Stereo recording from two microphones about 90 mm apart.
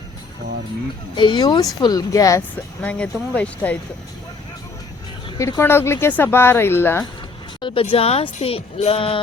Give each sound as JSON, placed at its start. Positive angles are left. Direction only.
{"t": 1.1, "sound": "speech", "side_deg": 60}
{"t": 1.8, "sound": "speech", "side_deg": 45}
{"t": 2.8, "sound": "speech", "side_deg": 15}
{"t": 5.4, "sound": "speech", "side_deg": 30}
{"t": 7.6, "sound": "speech", "side_deg": 70}